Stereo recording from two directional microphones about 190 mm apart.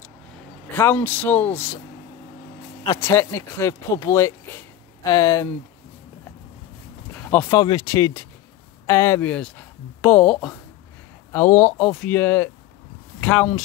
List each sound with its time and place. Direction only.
0.7 s speech: 10° left (ahead or behind)
3.0 s speech: 15° left (ahead or behind)
7.2 s speech: 15° left (ahead or behind)